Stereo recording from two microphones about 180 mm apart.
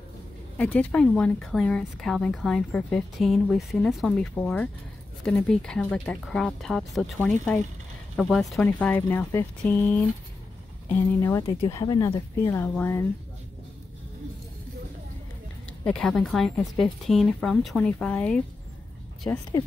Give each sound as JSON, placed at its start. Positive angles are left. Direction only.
{"t": 0.6, "sound": "a woman's voice", "side_deg": 5}
{"t": 11.1, "sound": "speech", "side_deg": 15}
{"t": 11.4, "sound": "speech", "side_deg": 30}
{"t": 11.7, "sound": "speech", "side_deg": 20}
{"t": 15.8, "sound": "a woman's voice", "side_deg": 5}